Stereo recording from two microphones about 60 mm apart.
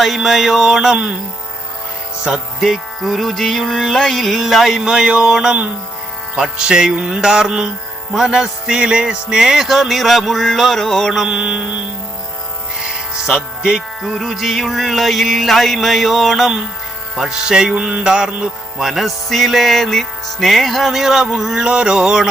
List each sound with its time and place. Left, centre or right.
0.0 s music: centre
2.2 s music: centre
11.3 s mantra: centre
13.2 s speech: centre
14.0 s music: centre
17.7 s mantra: right
18.8 s music: centre